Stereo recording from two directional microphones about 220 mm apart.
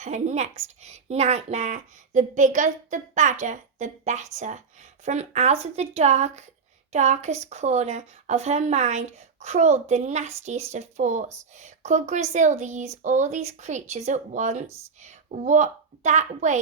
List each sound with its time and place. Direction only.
0.0 s a woman's voice: 35° right (ahead or behind)